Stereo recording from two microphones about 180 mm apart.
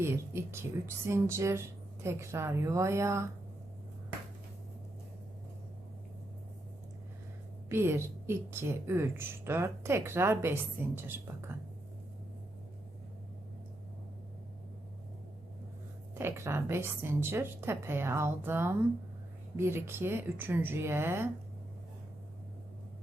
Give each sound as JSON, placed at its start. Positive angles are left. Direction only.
{"t": 0.0, "sound": "a woman's voice", "side_deg": -15}
{"t": 7.7, "sound": "a woman's voice", "side_deg": -15}
{"t": 16.1, "sound": "a woman's voice", "side_deg": -15}